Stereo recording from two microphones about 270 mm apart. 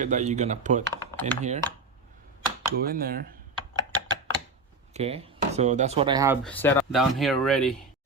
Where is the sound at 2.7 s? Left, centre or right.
Right.